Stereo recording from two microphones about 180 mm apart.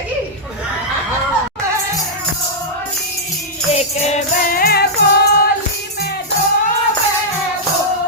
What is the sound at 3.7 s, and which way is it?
Music, 35° left (ahead or behind).